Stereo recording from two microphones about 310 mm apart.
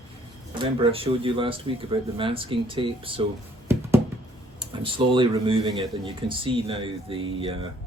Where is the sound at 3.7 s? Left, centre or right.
Centre.